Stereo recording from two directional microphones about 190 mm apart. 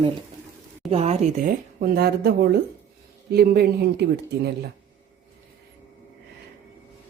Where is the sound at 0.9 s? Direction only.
35° right (ahead or behind).